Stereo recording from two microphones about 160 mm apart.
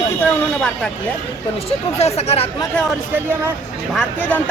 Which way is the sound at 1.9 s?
40° left (ahead or behind).